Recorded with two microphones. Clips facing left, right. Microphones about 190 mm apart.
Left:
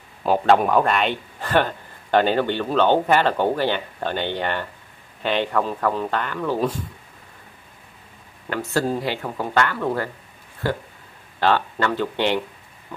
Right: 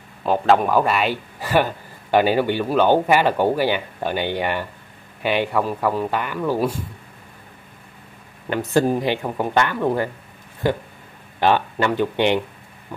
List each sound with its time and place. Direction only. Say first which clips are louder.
0.2 s a man's voice: even; 5° left (ahead or behind)
8.5 s a man's voice: right 4 dB; 20° right (ahead or behind)